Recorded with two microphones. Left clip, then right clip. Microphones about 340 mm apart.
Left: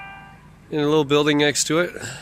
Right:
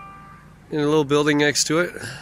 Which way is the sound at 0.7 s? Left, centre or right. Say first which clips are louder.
Left 1 dB; centre.